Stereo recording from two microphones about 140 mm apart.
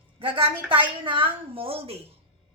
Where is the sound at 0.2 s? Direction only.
40° right (ahead or behind).